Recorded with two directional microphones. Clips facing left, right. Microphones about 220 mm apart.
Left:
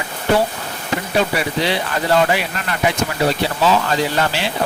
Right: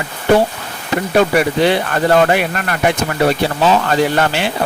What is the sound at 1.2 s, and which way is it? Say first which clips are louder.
Speech: right 7 dB; 55° right (ahead or behind).